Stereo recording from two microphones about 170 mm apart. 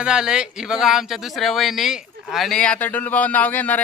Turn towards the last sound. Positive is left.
turn(degrees=10)  # may be behind; listen again after turning